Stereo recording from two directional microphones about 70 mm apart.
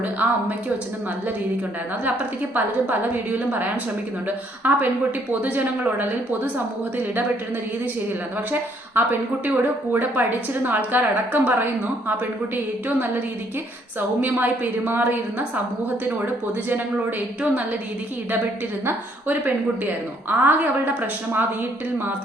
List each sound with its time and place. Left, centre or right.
0.0 s a woman's voice: right
2.6 s a woman's voice: right
9.0 s a woman's voice: right
14.2 s a woman's voice: right
18.9 s a woman's voice: right